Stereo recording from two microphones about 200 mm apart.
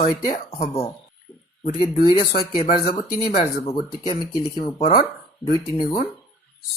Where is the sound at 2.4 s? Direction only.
25° left (ahead or behind).